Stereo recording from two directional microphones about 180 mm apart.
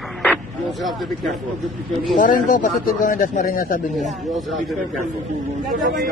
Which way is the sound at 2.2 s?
45° left (ahead or behind).